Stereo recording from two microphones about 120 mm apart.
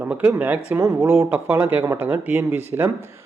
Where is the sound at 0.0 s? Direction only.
10° right (ahead or behind).